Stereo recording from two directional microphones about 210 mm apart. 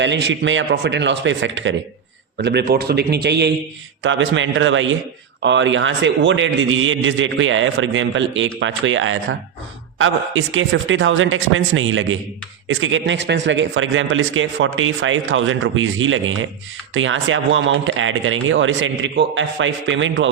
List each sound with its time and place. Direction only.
0.0 s a man's voice: 60° right (ahead or behind)
4.0 s a man's voice: 65° right (ahead or behind)